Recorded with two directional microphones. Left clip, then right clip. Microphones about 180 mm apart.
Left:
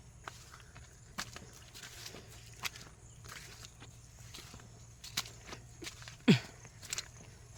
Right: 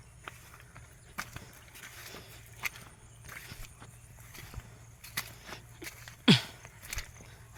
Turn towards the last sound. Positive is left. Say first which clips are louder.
# right 5 dB
turn(degrees=-10)  # may be behind; listen again after turning